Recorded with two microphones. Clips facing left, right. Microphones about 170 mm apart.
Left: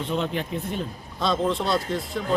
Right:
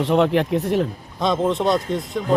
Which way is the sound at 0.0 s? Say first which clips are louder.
Right 9 dB; 75° right (ahead or behind).